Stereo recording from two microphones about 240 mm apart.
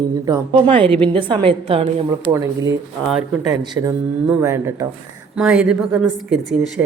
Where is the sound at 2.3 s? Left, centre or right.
Centre.